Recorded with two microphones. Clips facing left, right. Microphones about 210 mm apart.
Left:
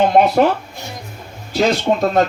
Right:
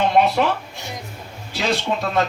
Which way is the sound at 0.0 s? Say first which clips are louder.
Left 5 dB; 45° left (ahead or behind).